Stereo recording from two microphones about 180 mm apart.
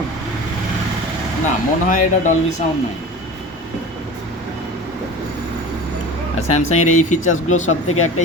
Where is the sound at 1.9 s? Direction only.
45° left (ahead or behind).